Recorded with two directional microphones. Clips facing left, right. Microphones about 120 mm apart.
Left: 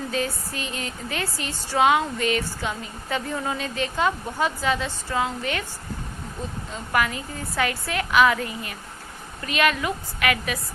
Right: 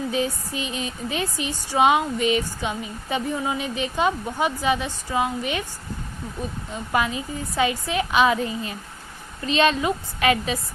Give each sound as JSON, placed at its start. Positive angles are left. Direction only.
{"t": 0.1, "sound": "a woman's voice", "side_deg": -20}
{"t": 6.7, "sound": "a woman's voice", "side_deg": -20}